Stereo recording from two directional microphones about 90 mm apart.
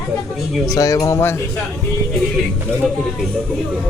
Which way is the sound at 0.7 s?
40° left (ahead or behind).